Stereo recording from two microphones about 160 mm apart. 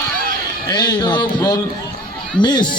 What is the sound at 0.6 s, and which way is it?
A man's voice, 25° left (ahead or behind).